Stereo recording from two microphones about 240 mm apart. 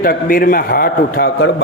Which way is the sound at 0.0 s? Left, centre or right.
Left.